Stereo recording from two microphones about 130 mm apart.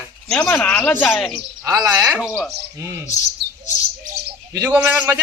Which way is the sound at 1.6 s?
30° right (ahead or behind).